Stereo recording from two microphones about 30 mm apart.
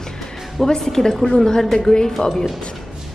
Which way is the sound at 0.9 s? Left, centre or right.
Centre.